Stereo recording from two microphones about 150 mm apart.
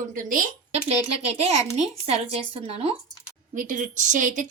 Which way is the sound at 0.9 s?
45° right (ahead or behind).